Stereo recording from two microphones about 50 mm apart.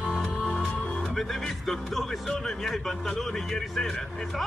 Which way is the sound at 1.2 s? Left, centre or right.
Centre.